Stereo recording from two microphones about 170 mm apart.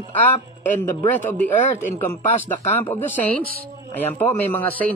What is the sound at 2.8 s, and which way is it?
Speech, 10° left (ahead or behind).